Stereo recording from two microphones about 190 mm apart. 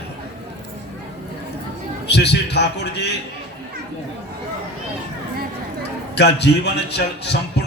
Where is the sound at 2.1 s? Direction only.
65° left (ahead or behind).